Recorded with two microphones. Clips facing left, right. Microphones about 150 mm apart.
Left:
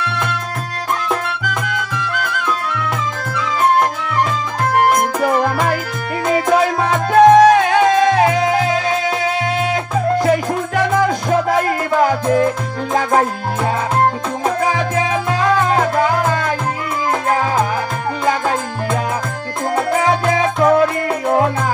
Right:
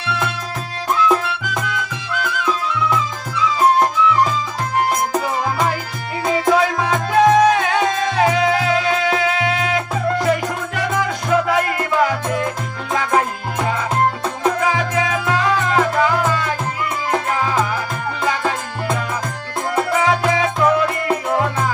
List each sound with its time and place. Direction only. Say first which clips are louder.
0.0 s music: left 1 dB; 55° left (ahead or behind)
6.5 s music: left 2 dB; 45° left (ahead or behind)
10.2 s music: left 3 dB; 45° left (ahead or behind)
14.4 s music: left 1 dB; 45° left (ahead or behind)
19.7 s music: left 2 dB; 45° left (ahead or behind)